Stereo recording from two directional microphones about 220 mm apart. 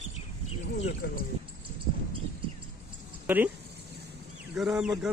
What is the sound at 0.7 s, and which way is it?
Speech, 30° left (ahead or behind).